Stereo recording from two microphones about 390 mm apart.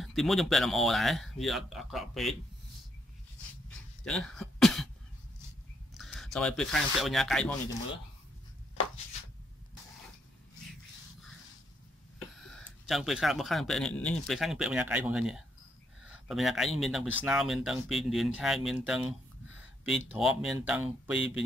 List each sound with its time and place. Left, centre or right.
0.0 s speech: centre
4.0 s throat clearing: centre
5.9 s speech: centre
12.4 s speech: centre